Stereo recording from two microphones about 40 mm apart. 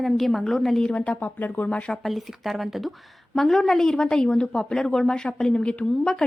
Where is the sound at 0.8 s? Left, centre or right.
Left.